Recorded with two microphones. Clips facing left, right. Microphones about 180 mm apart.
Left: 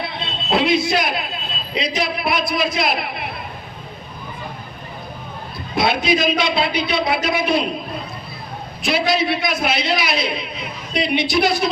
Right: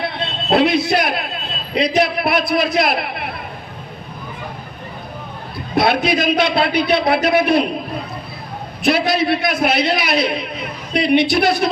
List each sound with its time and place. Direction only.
0.5 s a man's voice: 60° right (ahead or behind)
5.7 s a man's voice: 60° right (ahead or behind)
8.8 s a man's voice: 60° right (ahead or behind)